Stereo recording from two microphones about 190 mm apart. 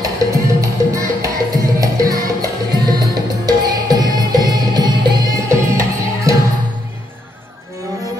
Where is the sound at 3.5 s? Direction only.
20° right (ahead or behind).